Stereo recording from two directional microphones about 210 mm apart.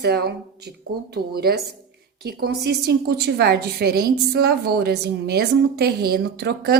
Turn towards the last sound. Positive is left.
turn(degrees=-50)  # may be behind; listen again after turning